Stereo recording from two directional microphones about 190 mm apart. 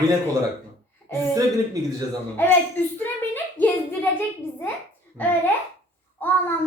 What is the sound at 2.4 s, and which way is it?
Speech, 10° left (ahead or behind).